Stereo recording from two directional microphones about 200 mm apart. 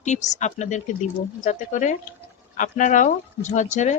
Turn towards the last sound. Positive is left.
turn(degrees=35)  # may be behind; listen again after turning